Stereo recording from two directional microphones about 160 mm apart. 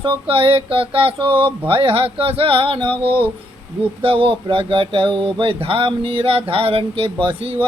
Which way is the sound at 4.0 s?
35° right (ahead or behind).